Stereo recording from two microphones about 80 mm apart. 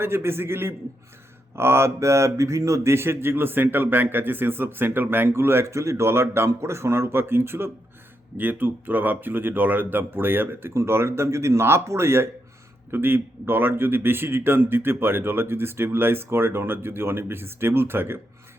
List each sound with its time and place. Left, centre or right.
0.0 s a man's voice: right